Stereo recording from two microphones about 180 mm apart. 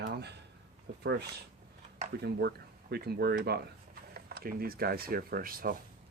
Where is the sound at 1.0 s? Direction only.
70° right (ahead or behind); by 5.8 s 55° right (ahead or behind).